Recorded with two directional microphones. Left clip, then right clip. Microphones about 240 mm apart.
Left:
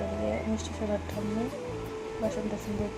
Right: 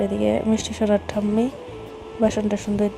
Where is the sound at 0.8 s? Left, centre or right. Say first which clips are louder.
Right 12 dB; right.